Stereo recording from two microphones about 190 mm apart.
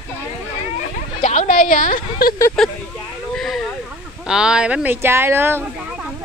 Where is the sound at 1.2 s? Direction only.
40° left (ahead or behind).